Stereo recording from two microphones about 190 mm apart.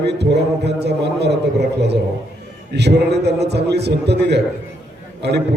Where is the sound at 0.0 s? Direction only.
60° right (ahead or behind).